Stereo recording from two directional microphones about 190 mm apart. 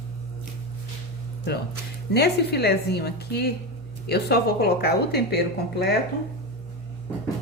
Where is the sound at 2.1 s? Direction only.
60° left (ahead or behind).